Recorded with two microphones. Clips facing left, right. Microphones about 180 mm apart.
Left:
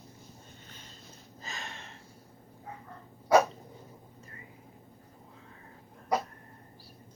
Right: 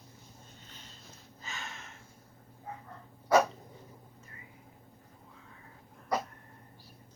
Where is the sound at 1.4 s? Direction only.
35° left (ahead or behind).